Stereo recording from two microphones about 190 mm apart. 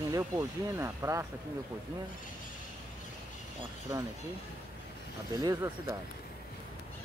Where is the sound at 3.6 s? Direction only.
15° right (ahead or behind).